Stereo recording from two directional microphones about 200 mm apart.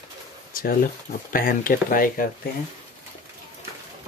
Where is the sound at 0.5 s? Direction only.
45° left (ahead or behind).